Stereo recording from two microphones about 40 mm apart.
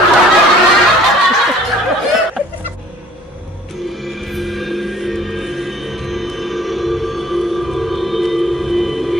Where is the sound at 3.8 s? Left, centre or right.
Centre.